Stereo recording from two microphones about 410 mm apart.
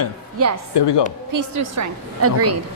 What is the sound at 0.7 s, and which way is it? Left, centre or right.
Speech, left.